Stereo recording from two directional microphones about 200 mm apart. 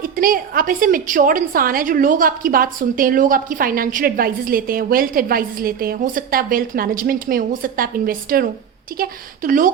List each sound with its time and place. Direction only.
0.0 s a woman's voice: 45° right (ahead or behind)